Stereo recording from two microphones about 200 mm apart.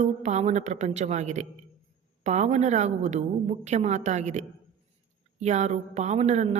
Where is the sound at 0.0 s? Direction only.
35° right (ahead or behind).